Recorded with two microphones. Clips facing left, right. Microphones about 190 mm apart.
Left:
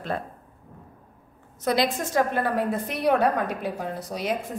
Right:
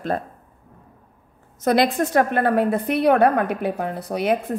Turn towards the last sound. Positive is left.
turn(degrees=-60)  # may be behind; listen again after turning